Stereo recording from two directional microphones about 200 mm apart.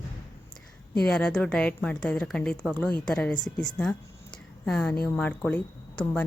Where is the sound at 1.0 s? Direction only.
5° left (ahead or behind).